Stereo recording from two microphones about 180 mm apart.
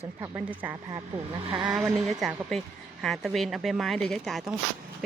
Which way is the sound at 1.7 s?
Centre (ahead or behind).